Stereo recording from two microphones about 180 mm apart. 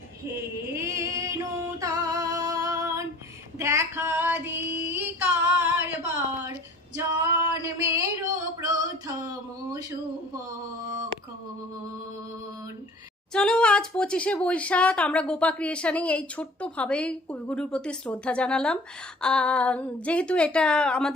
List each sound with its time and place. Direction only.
0.7 s music: 15° right (ahead or behind)
3.6 s female singing: 15° right (ahead or behind)
6.1 s a sound: 10° right (ahead or behind)
13.3 s a woman's voice: 5° left (ahead or behind)